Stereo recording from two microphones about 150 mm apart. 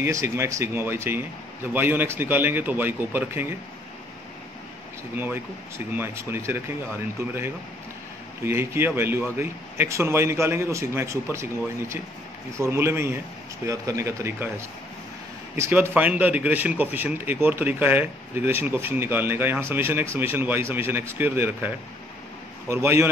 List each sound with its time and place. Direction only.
0.0 s a man's voice: 20° right (ahead or behind)
5.1 s a man's voice: 15° right (ahead or behind)
15.5 s a man's voice: 15° right (ahead or behind)